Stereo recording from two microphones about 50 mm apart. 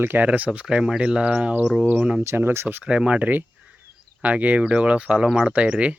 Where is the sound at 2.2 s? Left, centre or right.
Right.